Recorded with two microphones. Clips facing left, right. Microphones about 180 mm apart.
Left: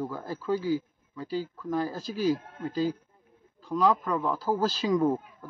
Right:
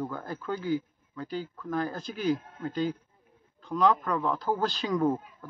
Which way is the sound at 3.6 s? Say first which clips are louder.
Even; 5° left (ahead or behind).